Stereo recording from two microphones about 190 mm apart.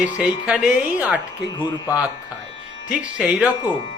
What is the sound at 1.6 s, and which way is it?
Speech, 20° left (ahead or behind).